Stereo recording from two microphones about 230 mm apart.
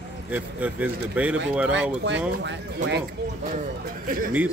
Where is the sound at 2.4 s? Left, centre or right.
Right.